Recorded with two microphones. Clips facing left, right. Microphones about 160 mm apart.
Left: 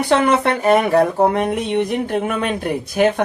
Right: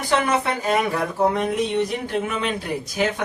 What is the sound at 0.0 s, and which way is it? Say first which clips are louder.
Speech: left 6 dB; 65° left (ahead or behind).